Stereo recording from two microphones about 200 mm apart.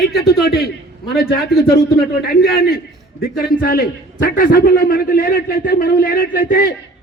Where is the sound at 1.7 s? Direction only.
50° left (ahead or behind).